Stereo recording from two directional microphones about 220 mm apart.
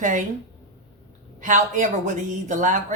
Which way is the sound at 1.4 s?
35° right (ahead or behind).